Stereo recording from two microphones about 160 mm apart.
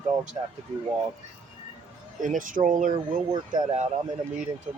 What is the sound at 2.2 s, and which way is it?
Speech, 55° right (ahead or behind).